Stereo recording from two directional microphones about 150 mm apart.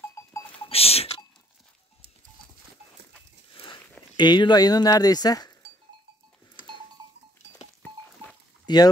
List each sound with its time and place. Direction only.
0.0 s goat: 20° left (ahead or behind)
0.7 s rodents: 40° left (ahead or behind)
3.5 s a sound: 35° left (ahead or behind)
4.2 s speech: 30° left (ahead or behind)
7.8 s a sound: 5° left (ahead or behind)
8.6 s speech: 25° left (ahead or behind)